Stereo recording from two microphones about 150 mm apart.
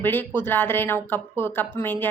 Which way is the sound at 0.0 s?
15° left (ahead or behind).